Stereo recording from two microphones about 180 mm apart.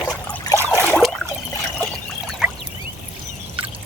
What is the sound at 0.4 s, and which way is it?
Boat, 15° left (ahead or behind).